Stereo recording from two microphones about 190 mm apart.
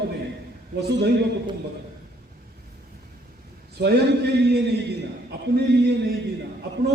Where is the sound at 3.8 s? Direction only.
60° right (ahead or behind).